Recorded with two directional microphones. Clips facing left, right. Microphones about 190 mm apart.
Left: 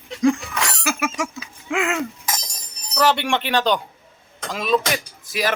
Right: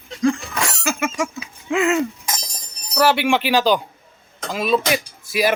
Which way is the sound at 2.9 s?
5° right (ahead or behind).